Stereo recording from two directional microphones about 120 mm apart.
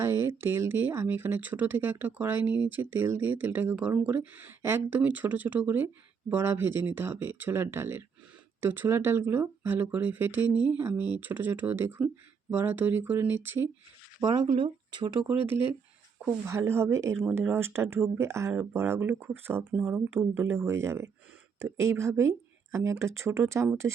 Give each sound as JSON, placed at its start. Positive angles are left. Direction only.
{"t": 0.0, "sound": "speech", "side_deg": -20}
{"t": 14.4, "sound": "speech", "side_deg": -45}
{"t": 16.2, "sound": "speech", "side_deg": -20}